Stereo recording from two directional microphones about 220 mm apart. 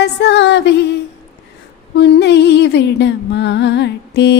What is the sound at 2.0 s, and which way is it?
Music, 50° left (ahead or behind).